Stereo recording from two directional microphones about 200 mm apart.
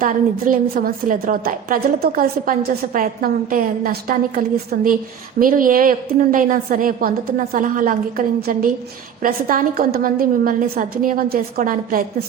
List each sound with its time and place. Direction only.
0.0 s a woman's voice: 45° right (ahead or behind)